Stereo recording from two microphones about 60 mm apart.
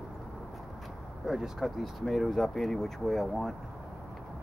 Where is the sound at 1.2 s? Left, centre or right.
Centre.